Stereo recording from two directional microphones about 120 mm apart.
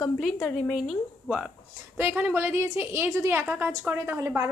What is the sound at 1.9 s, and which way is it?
A woman's voice, 15° right (ahead or behind).